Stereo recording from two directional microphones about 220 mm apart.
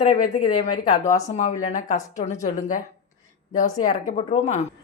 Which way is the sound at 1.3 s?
30° left (ahead or behind).